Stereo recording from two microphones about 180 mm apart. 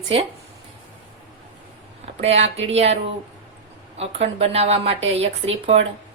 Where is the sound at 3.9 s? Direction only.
35° right (ahead or behind).